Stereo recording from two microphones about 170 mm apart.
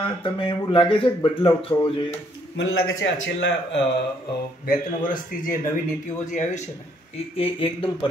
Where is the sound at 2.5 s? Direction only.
90° left.